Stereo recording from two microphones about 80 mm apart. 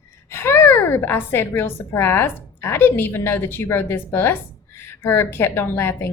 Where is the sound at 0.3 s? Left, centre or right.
Left.